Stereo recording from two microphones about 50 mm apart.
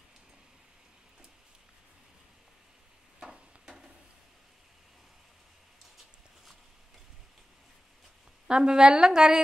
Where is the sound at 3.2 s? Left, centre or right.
Centre.